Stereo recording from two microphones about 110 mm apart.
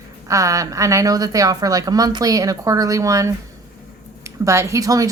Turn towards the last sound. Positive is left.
turn(degrees=-30)  # may be behind; listen again after turning